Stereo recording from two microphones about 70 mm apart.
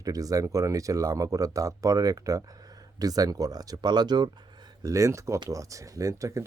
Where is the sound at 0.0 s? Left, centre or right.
Right.